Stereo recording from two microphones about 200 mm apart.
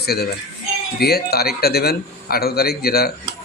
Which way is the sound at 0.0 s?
50° left (ahead or behind).